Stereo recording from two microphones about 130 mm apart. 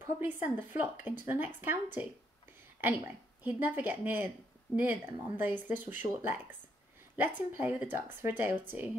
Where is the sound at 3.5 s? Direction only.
15° right (ahead or behind).